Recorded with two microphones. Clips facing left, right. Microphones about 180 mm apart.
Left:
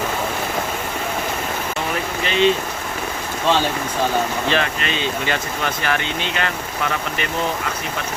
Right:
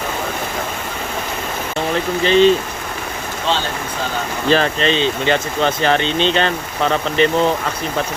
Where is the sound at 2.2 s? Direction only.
35° right (ahead or behind).